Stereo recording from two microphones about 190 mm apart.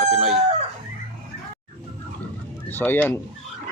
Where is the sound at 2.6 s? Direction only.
10° left (ahead or behind).